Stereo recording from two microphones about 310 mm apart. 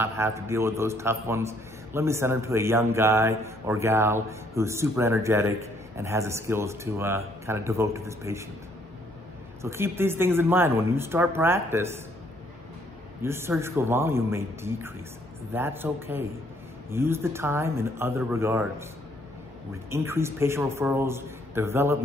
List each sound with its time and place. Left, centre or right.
0.0 s a man's voice: centre
9.6 s a man's voice: centre
13.2 s a man's voice: centre
19.9 s a man's voice: centre